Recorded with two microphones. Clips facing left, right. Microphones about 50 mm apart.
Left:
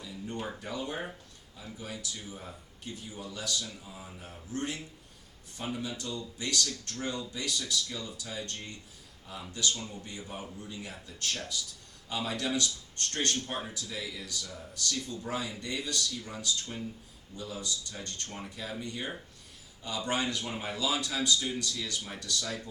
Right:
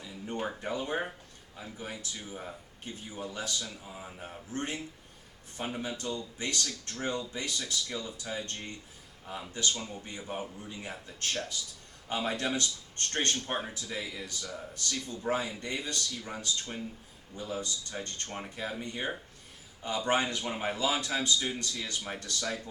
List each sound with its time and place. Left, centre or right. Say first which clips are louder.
0.0 s speech: right 2 dB; right
3.6 s speech: right 1 dB; right